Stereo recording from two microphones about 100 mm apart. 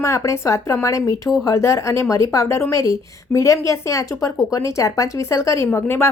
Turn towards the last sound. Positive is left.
turn(degrees=25)  # may be behind; listen again after turning